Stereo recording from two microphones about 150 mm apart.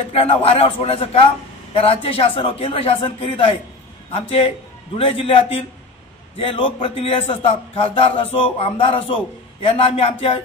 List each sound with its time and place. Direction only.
0.1 s a man's voice: 40° left (ahead or behind)